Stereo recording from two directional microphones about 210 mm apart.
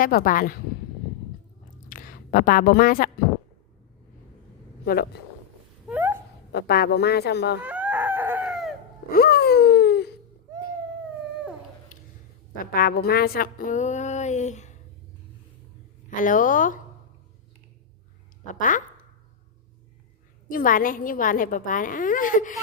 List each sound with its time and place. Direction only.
0.0 s speech: 40° left (ahead or behind)
1.9 s a woman's voice: 40° left (ahead or behind)
5.1 s speech: 50° left (ahead or behind)
5.9 s wail: 10° right (ahead or behind)
6.5 s speech: 50° left (ahead or behind)
7.6 s chicken: 10° right (ahead or behind)
9.1 s a sound: 50° left (ahead or behind)
11.9 s a sound: 40° left (ahead or behind)
12.7 s speech: 45° left (ahead or behind)
16.0 s speech: 40° left (ahead or behind)
18.4 s speech: 40° left (ahead or behind)
20.5 s speech: 40° left (ahead or behind)